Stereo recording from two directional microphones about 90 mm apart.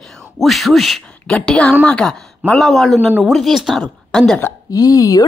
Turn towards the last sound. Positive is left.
turn(degrees=40)  # may be behind; listen again after turning